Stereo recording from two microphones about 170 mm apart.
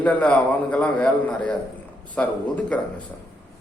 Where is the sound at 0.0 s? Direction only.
10° left (ahead or behind).